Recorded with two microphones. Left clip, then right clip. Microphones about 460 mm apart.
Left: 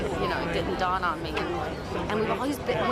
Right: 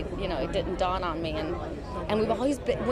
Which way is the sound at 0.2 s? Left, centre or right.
Right.